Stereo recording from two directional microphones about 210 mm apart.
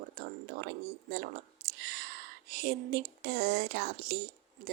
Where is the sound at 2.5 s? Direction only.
50° right (ahead or behind).